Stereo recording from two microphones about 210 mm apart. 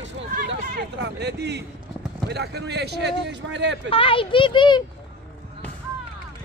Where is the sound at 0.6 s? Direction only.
55° right (ahead or behind).